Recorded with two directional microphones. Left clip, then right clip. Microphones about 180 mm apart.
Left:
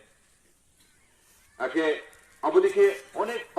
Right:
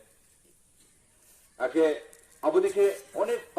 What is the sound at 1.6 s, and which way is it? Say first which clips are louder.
Speech: right 1 dB; 35° right (ahead or behind).